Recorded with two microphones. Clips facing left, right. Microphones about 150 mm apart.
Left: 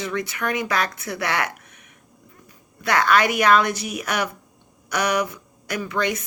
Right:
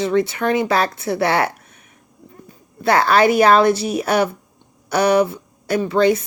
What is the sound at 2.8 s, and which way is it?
A woman's voice, 30° right (ahead or behind).